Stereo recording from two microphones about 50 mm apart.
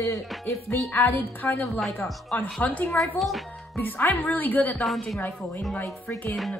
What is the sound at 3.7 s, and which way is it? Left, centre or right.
Speech, left.